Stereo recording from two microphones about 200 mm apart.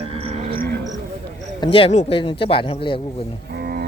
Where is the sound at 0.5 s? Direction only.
60° right (ahead or behind).